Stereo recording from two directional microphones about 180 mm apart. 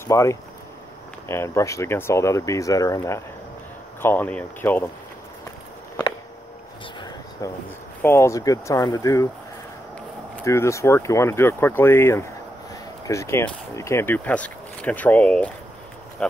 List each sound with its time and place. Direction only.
0.1 s speech: 15° left (ahead or behind)
7.0 s a sound: 20° left (ahead or behind)
8.0 s speech: 15° left (ahead or behind)
10.3 s speech: 15° left (ahead or behind)